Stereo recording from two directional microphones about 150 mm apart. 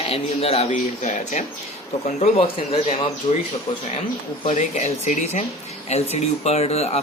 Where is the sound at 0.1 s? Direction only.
40° left (ahead or behind).